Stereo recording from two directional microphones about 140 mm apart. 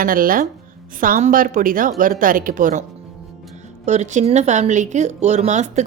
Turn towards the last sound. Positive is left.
turn(degrees=-55)  # may be behind; listen again after turning